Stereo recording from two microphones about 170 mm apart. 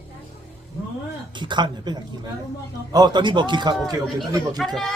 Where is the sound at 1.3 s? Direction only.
25° right (ahead or behind).